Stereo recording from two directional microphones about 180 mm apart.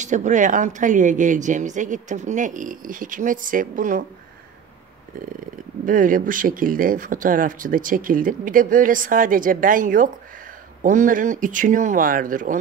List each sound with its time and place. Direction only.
0.0 s speech: 45° right (ahead or behind)
5.9 s speech: 50° right (ahead or behind)